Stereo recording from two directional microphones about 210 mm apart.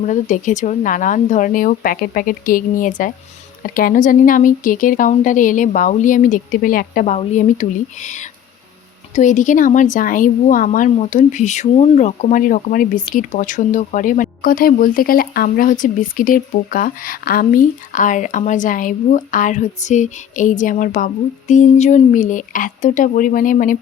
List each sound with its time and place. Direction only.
0.0 s speech: 35° left (ahead or behind)